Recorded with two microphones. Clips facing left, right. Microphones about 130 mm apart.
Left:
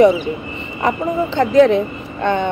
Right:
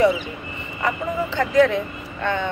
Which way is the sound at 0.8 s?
25° left (ahead or behind).